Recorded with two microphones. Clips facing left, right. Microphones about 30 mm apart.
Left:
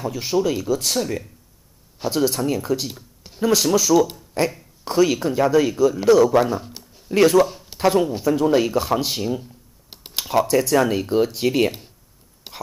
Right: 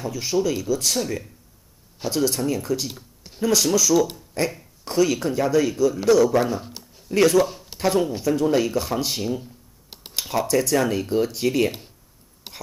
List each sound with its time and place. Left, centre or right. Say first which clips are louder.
0.1 s speech: left 1 dB; left
0.9 s speech: left 2 dB; centre
3.4 s speech: left 2 dB; centre
6.6 s a sound: even; centre
7.1 s speech: left 2 dB; centre
12.5 s whispering: left 2 dB; centre